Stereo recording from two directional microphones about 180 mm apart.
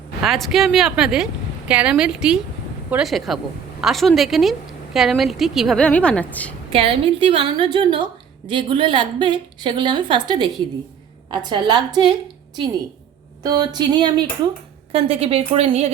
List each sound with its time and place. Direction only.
0.2 s a woman's voice: centre (ahead or behind)
6.7 s a woman's voice: 30° right (ahead or behind)
13.4 s a woman's voice: 20° right (ahead or behind)